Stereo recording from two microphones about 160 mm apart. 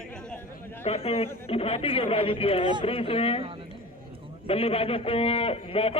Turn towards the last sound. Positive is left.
turn(degrees=40)  # may be behind; listen again after turning